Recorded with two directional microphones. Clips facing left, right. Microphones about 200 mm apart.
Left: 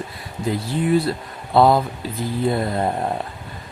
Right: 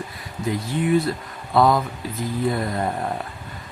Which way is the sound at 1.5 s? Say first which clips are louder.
Left 3 dB; 30° left (ahead or behind).